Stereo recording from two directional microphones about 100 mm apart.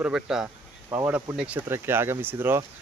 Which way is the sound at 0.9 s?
20° right (ahead or behind).